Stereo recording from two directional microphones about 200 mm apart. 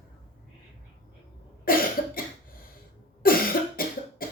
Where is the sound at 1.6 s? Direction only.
45° left (ahead or behind).